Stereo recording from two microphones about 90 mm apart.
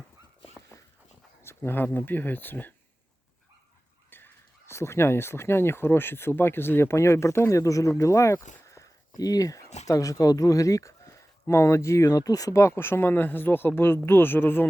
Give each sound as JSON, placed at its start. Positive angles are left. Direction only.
{"t": 1.4, "sound": "speech", "side_deg": 25}
{"t": 4.1, "sound": "speech", "side_deg": 25}